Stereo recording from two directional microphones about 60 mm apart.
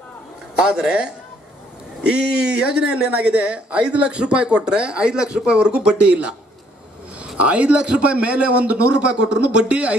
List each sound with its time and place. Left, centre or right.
0.6 s speech: centre
7.3 s speech: right